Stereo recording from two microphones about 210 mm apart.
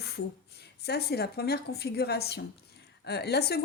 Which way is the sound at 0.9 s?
50° left (ahead or behind).